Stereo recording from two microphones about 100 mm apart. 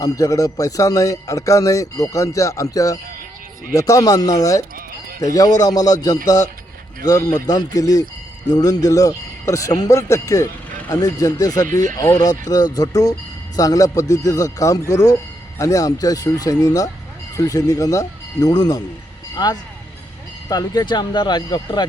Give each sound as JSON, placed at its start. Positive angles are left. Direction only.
{"t": 0.0, "sound": "speech", "side_deg": 35}